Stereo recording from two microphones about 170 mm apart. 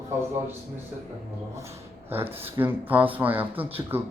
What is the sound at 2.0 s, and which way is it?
A man's voice, 10° right (ahead or behind).